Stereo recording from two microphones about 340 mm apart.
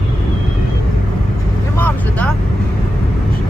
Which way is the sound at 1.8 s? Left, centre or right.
Centre.